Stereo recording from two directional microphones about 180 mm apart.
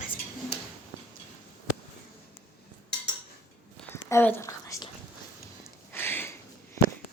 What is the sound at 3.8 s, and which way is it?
Whispering, 15° left (ahead or behind).